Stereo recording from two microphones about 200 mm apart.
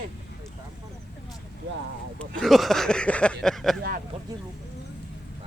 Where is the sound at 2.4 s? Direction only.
Centre (ahead or behind).